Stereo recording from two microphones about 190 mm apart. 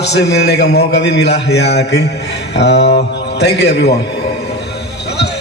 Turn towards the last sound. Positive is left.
turn(degrees=65)  # may be behind; listen again after turning